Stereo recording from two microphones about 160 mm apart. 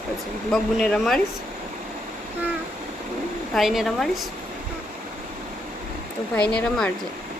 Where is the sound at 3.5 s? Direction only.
Centre (ahead or behind).